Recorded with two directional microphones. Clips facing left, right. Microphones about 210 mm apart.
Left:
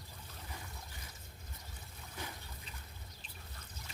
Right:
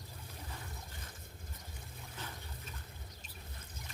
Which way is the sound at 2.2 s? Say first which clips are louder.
Left 2 dB; 10° left (ahead or behind).